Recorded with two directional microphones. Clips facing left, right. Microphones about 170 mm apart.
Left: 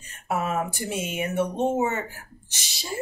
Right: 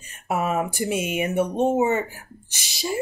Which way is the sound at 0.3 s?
15° right (ahead or behind).